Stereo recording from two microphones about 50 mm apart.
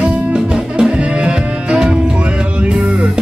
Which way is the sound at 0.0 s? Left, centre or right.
Centre.